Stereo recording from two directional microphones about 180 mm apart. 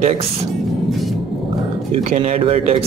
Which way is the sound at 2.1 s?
35° right (ahead or behind).